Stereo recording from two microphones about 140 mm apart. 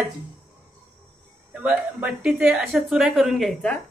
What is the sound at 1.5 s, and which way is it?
A woman's voice, 10° right (ahead or behind).